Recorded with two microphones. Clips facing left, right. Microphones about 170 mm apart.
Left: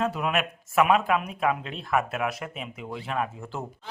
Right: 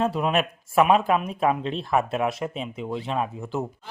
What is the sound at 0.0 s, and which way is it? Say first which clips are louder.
Speech: right 3 dB; 30° right (ahead or behind).